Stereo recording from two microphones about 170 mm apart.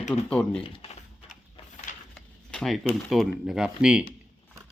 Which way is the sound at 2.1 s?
Centre (ahead or behind).